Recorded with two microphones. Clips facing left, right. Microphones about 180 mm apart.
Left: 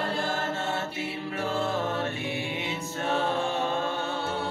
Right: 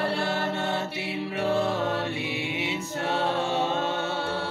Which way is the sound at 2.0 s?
20° right (ahead or behind).